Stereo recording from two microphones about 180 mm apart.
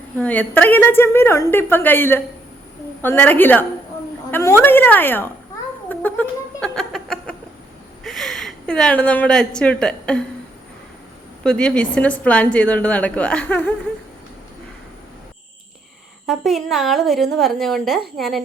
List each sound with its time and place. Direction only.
0.2 s a woman's voice: 10° left (ahead or behind)
5.9 s cat: 10° left (ahead or behind)
8.0 s a woman's voice: centre (ahead or behind)
11.4 s a woman's voice: 5° left (ahead or behind)
16.2 s speech: centre (ahead or behind)